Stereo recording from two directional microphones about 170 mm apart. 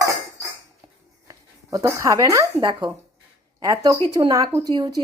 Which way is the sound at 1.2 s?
20° right (ahead or behind).